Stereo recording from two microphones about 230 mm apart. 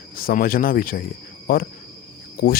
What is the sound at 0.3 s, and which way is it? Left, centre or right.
Speech, left.